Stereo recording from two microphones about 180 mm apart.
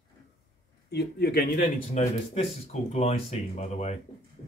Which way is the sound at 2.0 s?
35° left (ahead or behind).